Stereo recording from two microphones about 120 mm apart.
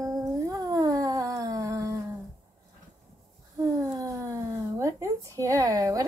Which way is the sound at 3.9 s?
30° right (ahead or behind).